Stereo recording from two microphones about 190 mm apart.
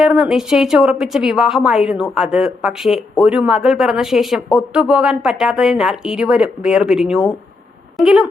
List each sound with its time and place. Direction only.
0.0 s speech: centre (ahead or behind)